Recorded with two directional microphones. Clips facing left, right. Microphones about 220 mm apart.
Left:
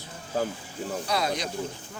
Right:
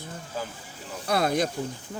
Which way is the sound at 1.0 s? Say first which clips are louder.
Right 6 dB; 55° right (ahead or behind).